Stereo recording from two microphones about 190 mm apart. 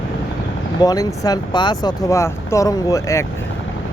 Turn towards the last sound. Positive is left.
turn(degrees=15)  # may be behind; listen again after turning